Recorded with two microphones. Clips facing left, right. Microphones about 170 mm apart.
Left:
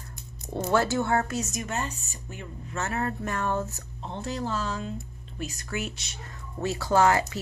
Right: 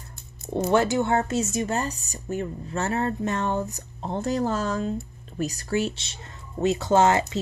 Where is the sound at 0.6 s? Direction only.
15° right (ahead or behind).